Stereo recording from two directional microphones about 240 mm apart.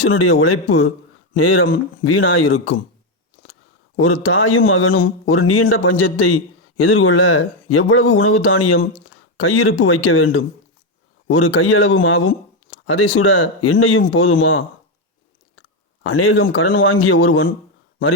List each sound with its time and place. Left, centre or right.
0.1 s speech: left
3.9 s speech: left
16.0 s speech: left